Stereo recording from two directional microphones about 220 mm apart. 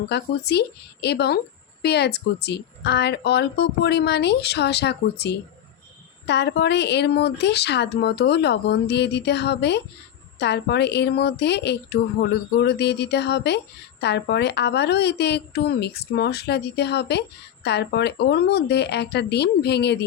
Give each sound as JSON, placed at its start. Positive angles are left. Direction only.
{"t": 0.1, "sound": "a woman's voice", "side_deg": 50}